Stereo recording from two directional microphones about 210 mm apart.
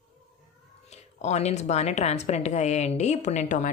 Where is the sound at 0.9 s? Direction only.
30° left (ahead or behind).